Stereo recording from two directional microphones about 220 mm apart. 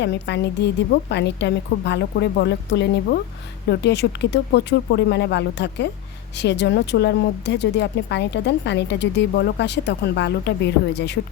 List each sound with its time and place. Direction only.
0.0 s a woman's voice: 50° left (ahead or behind)